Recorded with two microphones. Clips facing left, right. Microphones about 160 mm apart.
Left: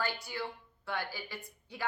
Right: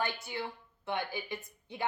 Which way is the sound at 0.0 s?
20° right (ahead or behind).